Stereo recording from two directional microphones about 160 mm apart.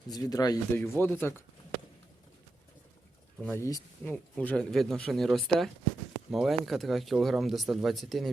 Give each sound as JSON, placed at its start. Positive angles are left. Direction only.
{"t": 0.1, "sound": "speech", "side_deg": 25}
{"t": 3.5, "sound": "speech", "side_deg": 20}
{"t": 4.0, "sound": "speech", "side_deg": 5}